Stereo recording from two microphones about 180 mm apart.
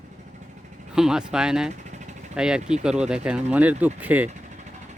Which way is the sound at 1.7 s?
40° right (ahead or behind).